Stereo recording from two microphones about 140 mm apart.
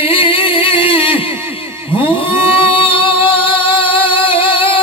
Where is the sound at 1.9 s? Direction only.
40° left (ahead or behind).